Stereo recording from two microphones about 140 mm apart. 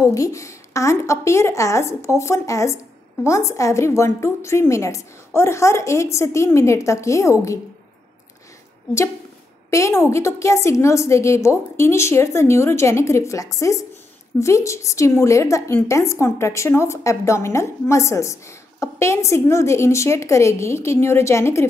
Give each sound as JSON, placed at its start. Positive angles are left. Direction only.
{"t": 0.0, "sound": "a woman's voice", "side_deg": 25}
{"t": 9.7, "sound": "a woman's voice", "side_deg": 20}